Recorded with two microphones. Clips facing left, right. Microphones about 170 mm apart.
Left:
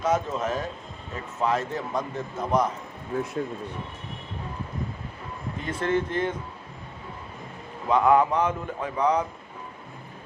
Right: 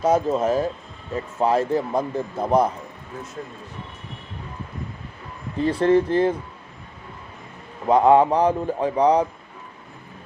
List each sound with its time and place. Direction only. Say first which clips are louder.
0.0 s speech: right 6 dB; 35° right (ahead or behind)
5.5 s speech: right 9 dB; 30° right (ahead or behind)
7.9 s speech: right 5 dB; 30° right (ahead or behind)